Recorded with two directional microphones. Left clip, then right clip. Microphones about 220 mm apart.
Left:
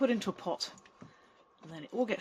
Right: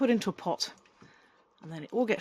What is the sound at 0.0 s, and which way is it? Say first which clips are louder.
Speech: right 3 dB; 50° right (ahead or behind).